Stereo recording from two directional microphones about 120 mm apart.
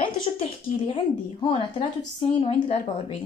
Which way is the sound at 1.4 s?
40° left (ahead or behind).